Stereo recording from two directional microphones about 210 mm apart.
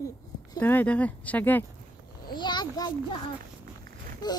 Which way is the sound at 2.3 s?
20° left (ahead or behind).